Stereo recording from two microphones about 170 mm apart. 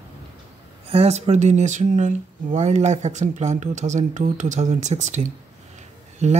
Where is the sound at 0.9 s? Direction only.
40° right (ahead or behind).